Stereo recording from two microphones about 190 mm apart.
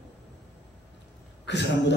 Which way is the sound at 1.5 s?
65° left (ahead or behind).